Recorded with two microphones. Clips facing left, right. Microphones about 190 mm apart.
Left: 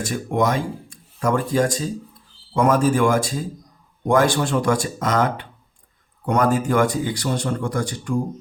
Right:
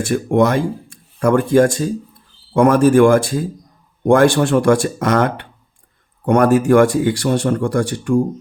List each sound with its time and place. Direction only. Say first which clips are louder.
0.1 s a man's voice: right 7 dB; 75° right (ahead or behind)
1.2 s a man's voice: right 7 dB; 60° right (ahead or behind)